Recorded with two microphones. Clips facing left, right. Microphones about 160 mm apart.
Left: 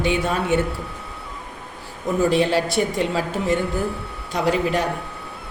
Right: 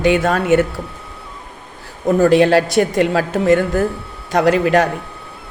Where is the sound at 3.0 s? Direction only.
75° right (ahead or behind).